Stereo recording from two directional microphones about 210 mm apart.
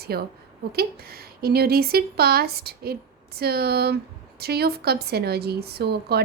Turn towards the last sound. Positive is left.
turn(degrees=-50)  # may be behind; listen again after turning